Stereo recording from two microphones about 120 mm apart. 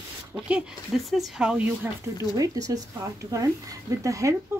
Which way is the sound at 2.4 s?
30° right (ahead or behind).